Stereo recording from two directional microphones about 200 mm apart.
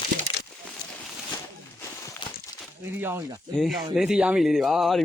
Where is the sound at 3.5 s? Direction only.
Centre (ahead or behind).